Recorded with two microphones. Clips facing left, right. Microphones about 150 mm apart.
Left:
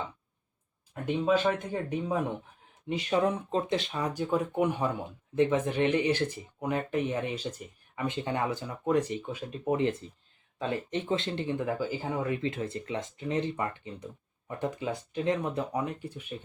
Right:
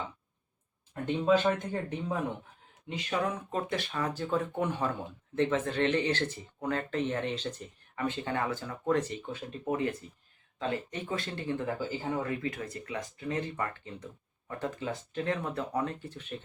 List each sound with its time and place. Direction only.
1.0 s speech: 5° left (ahead or behind)
3.1 s speech: 25° left (ahead or behind); by 12.3 s 10° left (ahead or behind)
12.4 s speech: 25° left (ahead or behind)